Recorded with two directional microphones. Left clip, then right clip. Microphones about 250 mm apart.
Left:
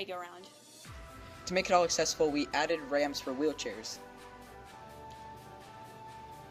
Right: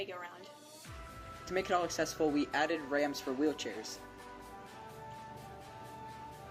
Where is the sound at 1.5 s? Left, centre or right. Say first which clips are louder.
Left 5 dB; left.